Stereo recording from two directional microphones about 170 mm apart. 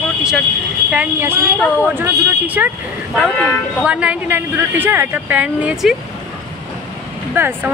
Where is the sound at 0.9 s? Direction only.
10° right (ahead or behind).